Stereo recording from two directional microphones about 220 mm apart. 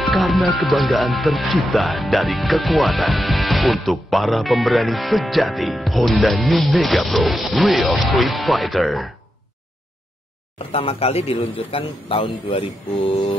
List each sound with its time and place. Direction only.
0.0 s speech: centre (ahead or behind)
10.7 s a man's voice: 25° left (ahead or behind)